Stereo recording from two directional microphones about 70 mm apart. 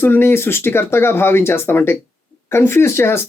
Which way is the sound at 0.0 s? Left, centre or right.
Left.